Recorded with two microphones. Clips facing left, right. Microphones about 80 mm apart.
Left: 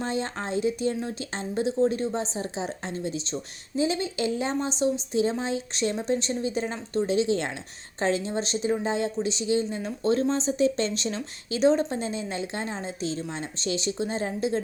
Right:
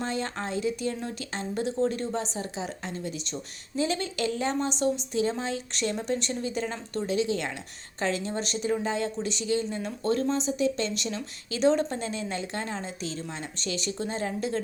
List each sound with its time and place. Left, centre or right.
0.0 s speech: left
3.8 s speech: centre